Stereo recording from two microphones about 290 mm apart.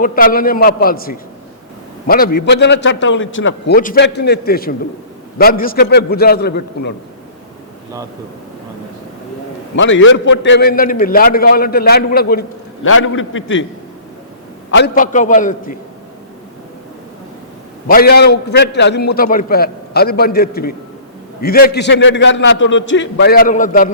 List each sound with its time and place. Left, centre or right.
0.0 s a man's voice: left
3.8 s a man's voice: left
9.7 s a man's voice: left
12.9 s a man's voice: left
14.7 s a man's voice: left
17.8 s a man's voice: left